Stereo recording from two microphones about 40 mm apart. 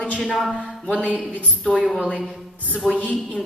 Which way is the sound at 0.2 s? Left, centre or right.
Centre.